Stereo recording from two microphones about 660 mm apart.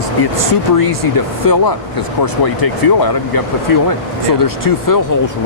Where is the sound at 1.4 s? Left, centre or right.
Left.